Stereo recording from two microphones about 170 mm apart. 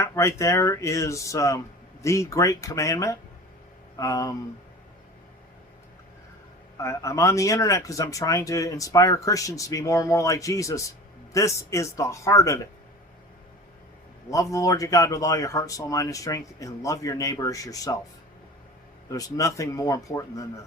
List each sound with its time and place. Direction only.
0.0 s speech: 15° left (ahead or behind)
6.7 s speech: 20° left (ahead or behind)
14.3 s speech: 20° left (ahead or behind)
19.1 s speech: 20° left (ahead or behind)